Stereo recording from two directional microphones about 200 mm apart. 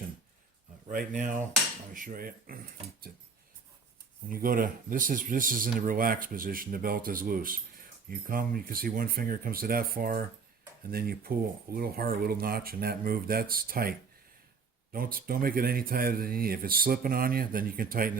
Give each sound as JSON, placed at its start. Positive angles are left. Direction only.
{"t": 0.9, "sound": "speech", "side_deg": -40}
{"t": 4.3, "sound": "speech", "side_deg": -45}
{"t": 14.9, "sound": "speech", "side_deg": -45}